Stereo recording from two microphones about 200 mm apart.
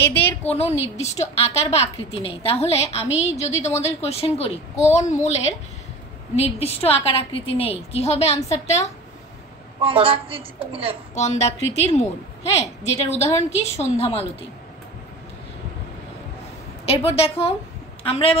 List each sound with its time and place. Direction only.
0.1 s a woman's voice: 10° left (ahead or behind)
0.6 s a woman's voice: 30° left (ahead or behind)
9.8 s a woman's voice: 25° right (ahead or behind)
11.1 s a woman's voice: 35° left (ahead or behind)
16.8 s a woman's voice: 30° left (ahead or behind)